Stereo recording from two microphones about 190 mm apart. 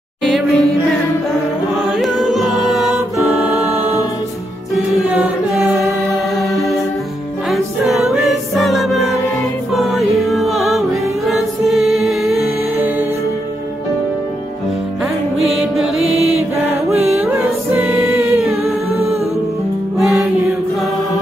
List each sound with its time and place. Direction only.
0.2 s music: centre (ahead or behind)
1.9 s a capella: centre (ahead or behind)
3.3 s music: centre (ahead or behind)
5.6 s music: 5° right (ahead or behind)
7.5 s music: centre (ahead or behind)
15.3 s music: centre (ahead or behind)
17.7 s a capella: 5° right (ahead or behind)
20.0 s music: centre (ahead or behind)